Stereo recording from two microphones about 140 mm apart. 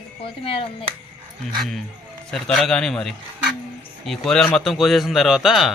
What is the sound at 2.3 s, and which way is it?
A man's voice, 5° left (ahead or behind).